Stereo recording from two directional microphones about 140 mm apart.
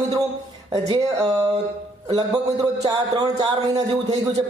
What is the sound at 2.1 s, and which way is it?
A man's voice, 30° right (ahead or behind).